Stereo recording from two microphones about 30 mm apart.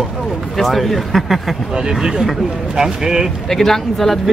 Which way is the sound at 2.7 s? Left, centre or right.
Right.